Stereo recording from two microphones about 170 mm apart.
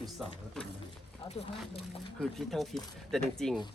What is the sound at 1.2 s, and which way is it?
Speech, 35° left (ahead or behind).